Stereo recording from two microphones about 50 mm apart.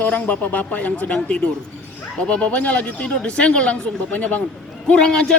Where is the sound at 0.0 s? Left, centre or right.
Left.